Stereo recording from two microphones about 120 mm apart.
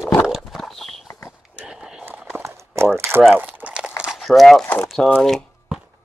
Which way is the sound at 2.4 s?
25° right (ahead or behind).